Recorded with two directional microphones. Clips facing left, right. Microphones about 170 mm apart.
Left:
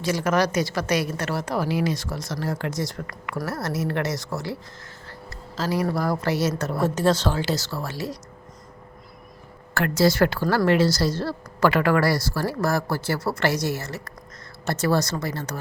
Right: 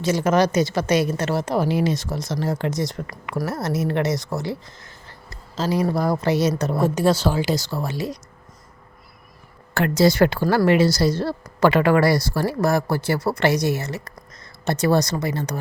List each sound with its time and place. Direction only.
0.0 s a woman's voice: 25° right (ahead or behind)
9.7 s a woman's voice: 20° right (ahead or behind)